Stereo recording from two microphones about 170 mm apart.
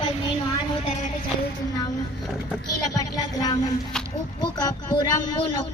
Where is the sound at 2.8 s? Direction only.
20° left (ahead or behind).